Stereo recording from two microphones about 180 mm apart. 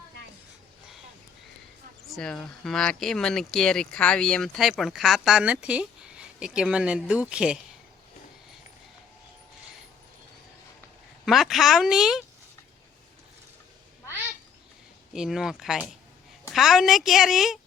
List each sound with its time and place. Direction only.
2.0 s speech: centre (ahead or behind)
11.3 s speech: centre (ahead or behind)
15.1 s speech: 5° right (ahead or behind)